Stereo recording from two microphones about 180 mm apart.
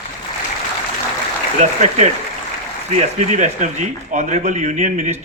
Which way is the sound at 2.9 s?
40° right (ahead or behind).